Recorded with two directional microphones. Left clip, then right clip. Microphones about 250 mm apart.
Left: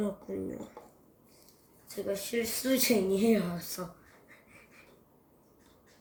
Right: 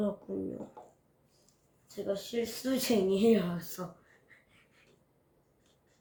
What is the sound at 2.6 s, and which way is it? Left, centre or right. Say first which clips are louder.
Speech: left 5 dB; left.